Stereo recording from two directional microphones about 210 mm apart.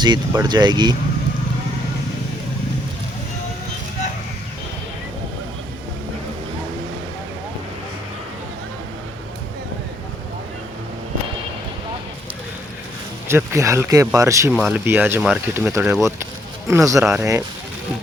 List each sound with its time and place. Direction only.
0.0 s speech: 20° right (ahead or behind)
13.2 s speech: 10° right (ahead or behind)
14.5 s speech: centre (ahead or behind)